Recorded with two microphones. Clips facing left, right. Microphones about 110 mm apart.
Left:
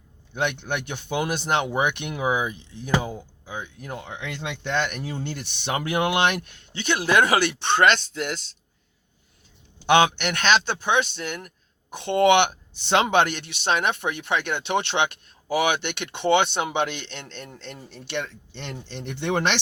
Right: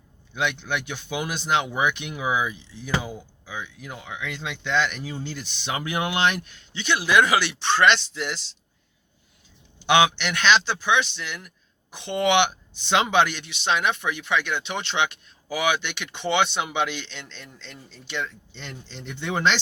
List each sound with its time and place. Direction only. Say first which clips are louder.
0.3 s speech: even; 55° left (ahead or behind)
9.8 s speech: left 1 dB; 45° left (ahead or behind); by 19.5 s 65° left (ahead or behind)